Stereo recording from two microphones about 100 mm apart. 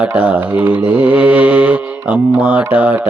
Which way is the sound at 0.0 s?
10° right (ahead or behind).